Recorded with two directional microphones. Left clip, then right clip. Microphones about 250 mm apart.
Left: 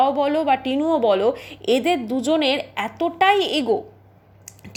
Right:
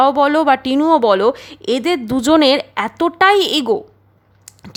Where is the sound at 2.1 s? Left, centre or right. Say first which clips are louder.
Right 8 dB; right.